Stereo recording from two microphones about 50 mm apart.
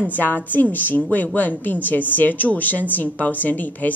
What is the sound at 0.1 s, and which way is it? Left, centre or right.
A woman's voice, left.